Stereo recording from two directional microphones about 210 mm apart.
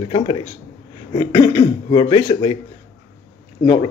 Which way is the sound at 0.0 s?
25° left (ahead or behind).